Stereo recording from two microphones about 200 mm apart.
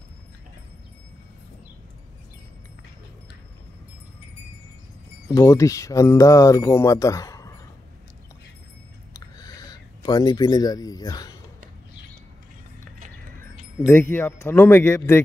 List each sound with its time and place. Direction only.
5.3 s speech: 15° left (ahead or behind)
9.1 s a sound: 20° left (ahead or behind)
13.8 s speech: 10° left (ahead or behind)